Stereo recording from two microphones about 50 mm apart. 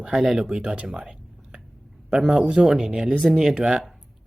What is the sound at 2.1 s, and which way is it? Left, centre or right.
Speech, centre.